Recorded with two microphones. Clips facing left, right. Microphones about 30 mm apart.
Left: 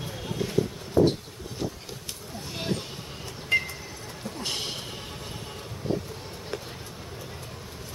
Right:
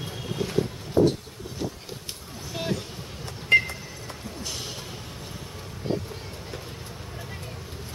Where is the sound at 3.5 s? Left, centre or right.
Right.